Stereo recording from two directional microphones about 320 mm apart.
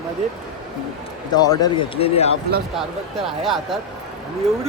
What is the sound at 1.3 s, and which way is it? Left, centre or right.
Speech, centre.